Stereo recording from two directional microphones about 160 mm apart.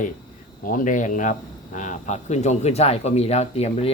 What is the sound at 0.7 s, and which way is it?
Speech, 55° left (ahead or behind).